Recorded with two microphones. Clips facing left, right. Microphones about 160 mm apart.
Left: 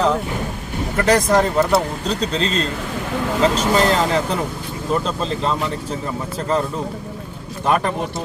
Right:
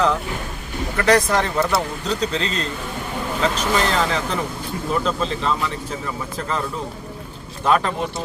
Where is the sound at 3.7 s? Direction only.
40° left (ahead or behind).